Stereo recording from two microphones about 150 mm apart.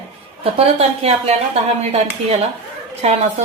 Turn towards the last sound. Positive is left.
turn(degrees=-45)  # may be behind; listen again after turning